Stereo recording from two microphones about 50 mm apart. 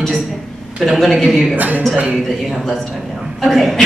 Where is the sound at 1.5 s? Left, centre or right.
Right.